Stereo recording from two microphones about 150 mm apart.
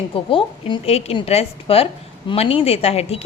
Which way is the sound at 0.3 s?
35° left (ahead or behind).